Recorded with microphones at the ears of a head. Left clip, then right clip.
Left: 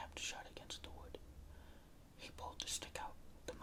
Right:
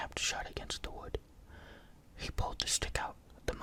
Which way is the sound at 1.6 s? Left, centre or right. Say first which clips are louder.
Right 8 dB; right.